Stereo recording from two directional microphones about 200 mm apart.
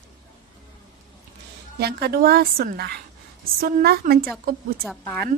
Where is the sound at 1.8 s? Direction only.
50° right (ahead or behind).